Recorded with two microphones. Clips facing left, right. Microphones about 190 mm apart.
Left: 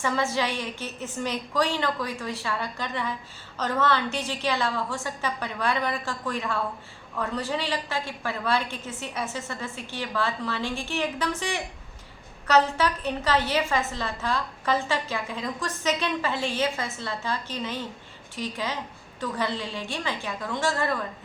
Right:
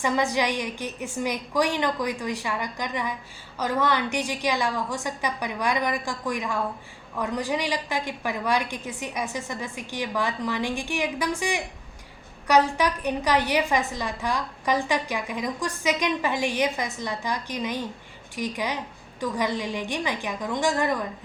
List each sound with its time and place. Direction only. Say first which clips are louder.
0.0 s a woman's voice: right 2 dB; 15° right (ahead or behind)